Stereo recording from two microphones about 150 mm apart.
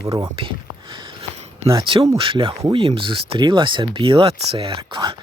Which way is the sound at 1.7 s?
30° right (ahead or behind).